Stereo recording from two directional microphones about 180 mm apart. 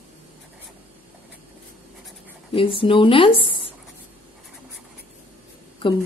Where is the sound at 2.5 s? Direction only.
30° left (ahead or behind).